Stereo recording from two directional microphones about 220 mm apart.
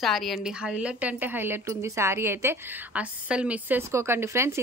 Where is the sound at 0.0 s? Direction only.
Centre (ahead or behind).